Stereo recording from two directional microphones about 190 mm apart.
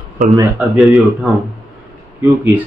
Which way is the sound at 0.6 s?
5° right (ahead or behind).